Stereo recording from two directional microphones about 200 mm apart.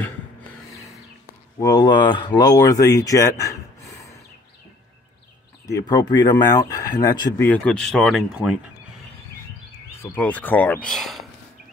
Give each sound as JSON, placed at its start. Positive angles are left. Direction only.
{"t": 1.6, "sound": "speech", "side_deg": 20}
{"t": 5.7, "sound": "speech", "side_deg": 20}
{"t": 10.1, "sound": "speech", "side_deg": 5}